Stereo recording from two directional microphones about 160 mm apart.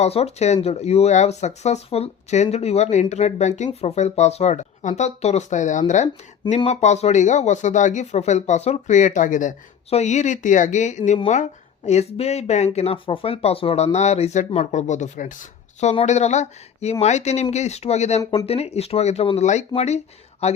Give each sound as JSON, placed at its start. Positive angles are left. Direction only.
{"t": 0.0, "sound": "speech", "side_deg": 40}
{"t": 6.6, "sound": "speech", "side_deg": 40}
{"t": 18.2, "sound": "speech", "side_deg": 25}
{"t": 18.4, "sound": "speech", "side_deg": 40}